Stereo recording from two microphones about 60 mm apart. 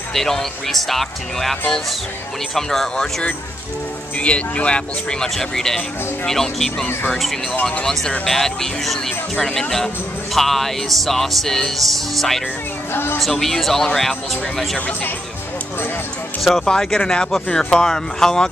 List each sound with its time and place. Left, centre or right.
0.1 s music: centre
2.5 s speech: centre
5.3 s speech: centre
7.8 s music: centre
12.9 s a woman's voice: left
13.2 s music: centre
16.3 s speech: centre